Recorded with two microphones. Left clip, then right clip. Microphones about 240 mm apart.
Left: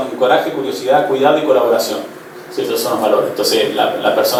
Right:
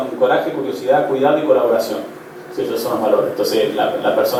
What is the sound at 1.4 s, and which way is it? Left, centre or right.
Speech, right.